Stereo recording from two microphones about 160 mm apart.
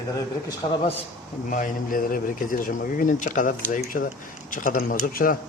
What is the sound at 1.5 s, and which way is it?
Speech, 55° left (ahead or behind).